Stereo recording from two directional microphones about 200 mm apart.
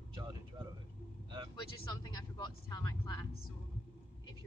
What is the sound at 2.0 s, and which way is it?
Speech, 20° left (ahead or behind).